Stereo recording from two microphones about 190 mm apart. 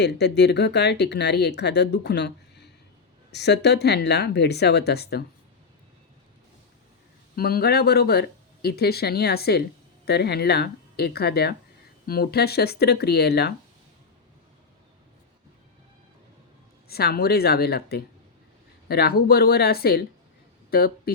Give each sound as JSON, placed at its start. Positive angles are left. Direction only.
{"t": 0.0, "sound": "speech", "side_deg": 60}
{"t": 7.3, "sound": "speech", "side_deg": 55}
{"t": 16.9, "sound": "speech", "side_deg": 55}